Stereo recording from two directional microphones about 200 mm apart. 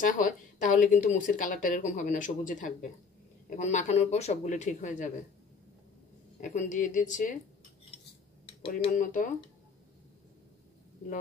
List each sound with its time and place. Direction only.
0.0 s speech: 40° left (ahead or behind)
6.4 s speech: 40° left (ahead or behind)
8.9 s speech: 40° left (ahead or behind)